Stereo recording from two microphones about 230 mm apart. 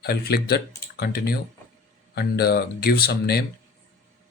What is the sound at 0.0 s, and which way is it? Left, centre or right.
Speech, left.